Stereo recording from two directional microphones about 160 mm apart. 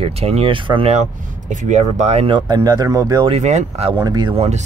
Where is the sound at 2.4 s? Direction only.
25° right (ahead or behind).